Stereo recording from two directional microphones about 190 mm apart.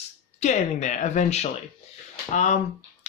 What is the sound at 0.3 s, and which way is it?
Speech, 40° left (ahead or behind).